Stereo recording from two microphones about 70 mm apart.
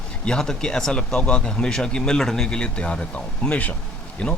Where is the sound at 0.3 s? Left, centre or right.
Centre.